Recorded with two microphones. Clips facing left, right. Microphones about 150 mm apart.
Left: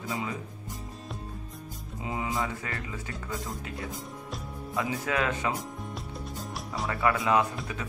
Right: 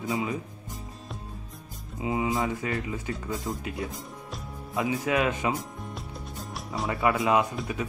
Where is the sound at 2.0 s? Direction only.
20° right (ahead or behind).